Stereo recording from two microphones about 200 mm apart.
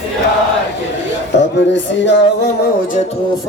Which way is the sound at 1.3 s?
60° left (ahead or behind).